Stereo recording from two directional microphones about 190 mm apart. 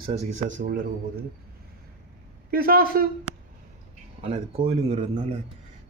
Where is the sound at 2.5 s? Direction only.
50° right (ahead or behind).